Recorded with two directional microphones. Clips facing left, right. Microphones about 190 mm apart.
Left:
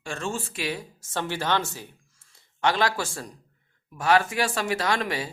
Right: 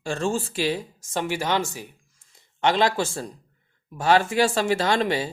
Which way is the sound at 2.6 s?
20° right (ahead or behind).